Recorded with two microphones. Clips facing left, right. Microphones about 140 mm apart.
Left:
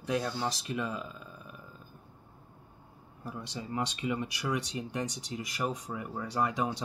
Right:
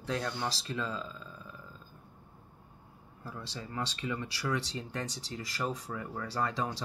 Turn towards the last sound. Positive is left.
turn(degrees=20)  # may be behind; listen again after turning